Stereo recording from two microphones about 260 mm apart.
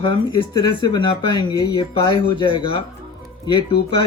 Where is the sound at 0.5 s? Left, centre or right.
Centre.